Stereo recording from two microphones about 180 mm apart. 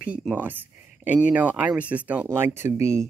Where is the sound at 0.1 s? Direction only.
10° right (ahead or behind).